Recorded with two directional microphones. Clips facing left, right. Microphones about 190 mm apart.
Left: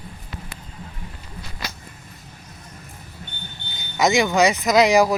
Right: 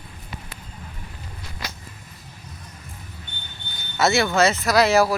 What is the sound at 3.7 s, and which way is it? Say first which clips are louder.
Speech: left 2 dB; 15° left (ahead or behind).